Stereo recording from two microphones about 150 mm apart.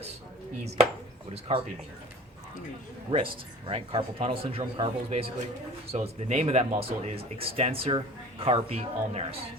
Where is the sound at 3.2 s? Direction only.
35° right (ahead or behind).